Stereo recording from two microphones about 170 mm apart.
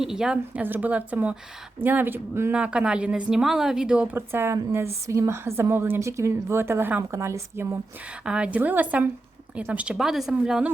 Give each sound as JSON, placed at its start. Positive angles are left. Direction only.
{"t": 0.0, "sound": "speech", "side_deg": -5}